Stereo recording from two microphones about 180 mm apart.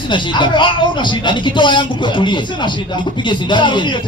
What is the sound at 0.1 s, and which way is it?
Speech, 25° left (ahead or behind).